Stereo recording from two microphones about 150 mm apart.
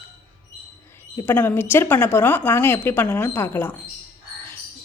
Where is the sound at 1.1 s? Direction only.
15° left (ahead or behind).